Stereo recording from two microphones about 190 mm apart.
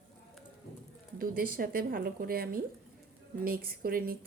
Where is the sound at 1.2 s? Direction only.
50° right (ahead or behind).